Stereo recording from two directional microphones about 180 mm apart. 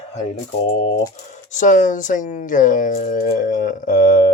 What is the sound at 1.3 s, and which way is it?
Speech, 45° left (ahead or behind).